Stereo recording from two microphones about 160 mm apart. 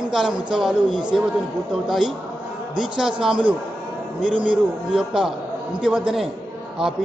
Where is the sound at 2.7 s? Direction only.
5° right (ahead or behind).